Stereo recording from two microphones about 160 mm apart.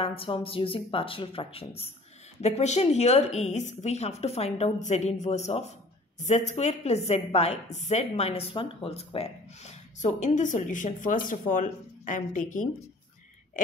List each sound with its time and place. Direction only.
0.0 s a woman's voice: 35° left (ahead or behind)
10.0 s a woman's voice: 50° left (ahead or behind)